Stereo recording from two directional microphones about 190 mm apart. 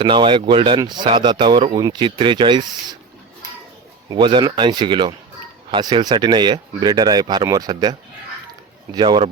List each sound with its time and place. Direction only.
0.0 s speech: 25° right (ahead or behind)
4.1 s speech: 25° right (ahead or behind)